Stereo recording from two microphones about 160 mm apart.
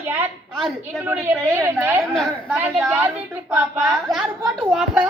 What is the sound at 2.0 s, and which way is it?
Speech, centre (ahead or behind).